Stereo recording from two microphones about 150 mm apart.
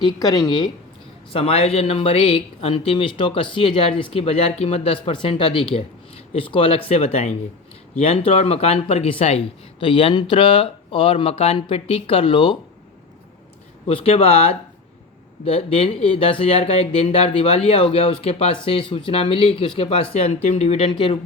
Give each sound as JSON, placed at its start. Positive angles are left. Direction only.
{"t": 0.0, "sound": "speech", "side_deg": 25}
{"t": 1.3, "sound": "speech", "side_deg": 40}
{"t": 13.8, "sound": "speech", "side_deg": 40}